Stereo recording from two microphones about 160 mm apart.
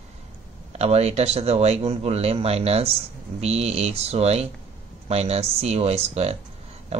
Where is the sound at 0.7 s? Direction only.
40° right (ahead or behind).